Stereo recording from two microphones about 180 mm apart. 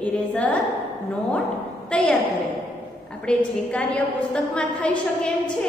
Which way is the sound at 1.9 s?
5° left (ahead or behind).